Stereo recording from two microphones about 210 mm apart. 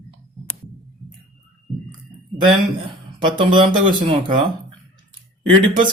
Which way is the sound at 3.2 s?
20° right (ahead or behind).